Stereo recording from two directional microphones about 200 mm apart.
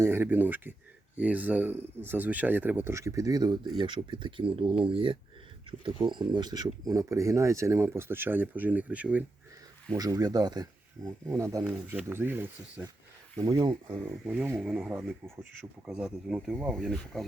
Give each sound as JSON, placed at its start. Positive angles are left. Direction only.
{"t": 0.0, "sound": "speech", "side_deg": -10}
{"t": 9.9, "sound": "speech", "side_deg": -20}
{"t": 13.3, "sound": "speech", "side_deg": -20}
{"t": 14.3, "sound": "speech", "side_deg": -10}